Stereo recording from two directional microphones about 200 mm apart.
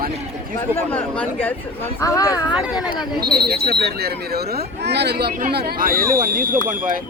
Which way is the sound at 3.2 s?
50° right (ahead or behind).